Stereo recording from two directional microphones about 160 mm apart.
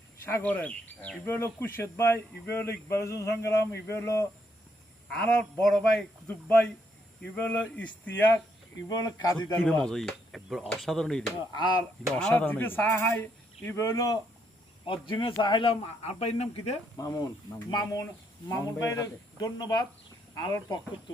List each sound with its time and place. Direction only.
0.3 s speech: 10° left (ahead or behind)
5.0 s speech: 5° left (ahead or behind)
8.9 s speech: 25° left (ahead or behind)
9.8 s speech: centre (ahead or behind)
11.5 s speech: 25° left (ahead or behind)
12.1 s speech: 10° left (ahead or behind)
14.8 s speech: 30° left (ahead or behind)
17.0 s speech: 20° left (ahead or behind)